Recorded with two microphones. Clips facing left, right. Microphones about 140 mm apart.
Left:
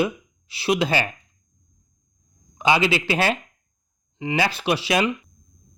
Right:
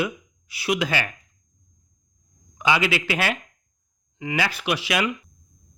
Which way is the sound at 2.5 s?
30° left (ahead or behind).